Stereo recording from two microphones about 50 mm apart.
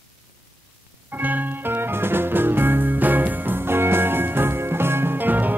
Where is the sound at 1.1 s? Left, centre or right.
Right.